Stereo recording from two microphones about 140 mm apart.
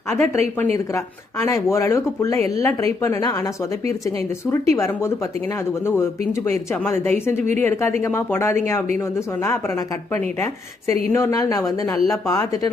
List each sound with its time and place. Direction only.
0.1 s speech: 20° left (ahead or behind)
7.1 s speech: 55° right (ahead or behind)
7.6 s speech: 15° left (ahead or behind)